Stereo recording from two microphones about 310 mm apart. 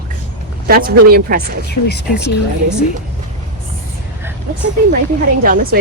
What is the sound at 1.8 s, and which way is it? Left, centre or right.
Speech, left.